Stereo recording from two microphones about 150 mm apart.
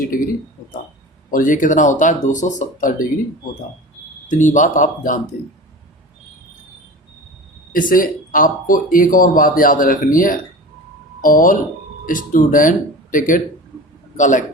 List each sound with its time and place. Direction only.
1.3 s speech: 60° left (ahead or behind)
4.3 s speech: 55° left (ahead or behind)
7.7 s speech: 65° left (ahead or behind)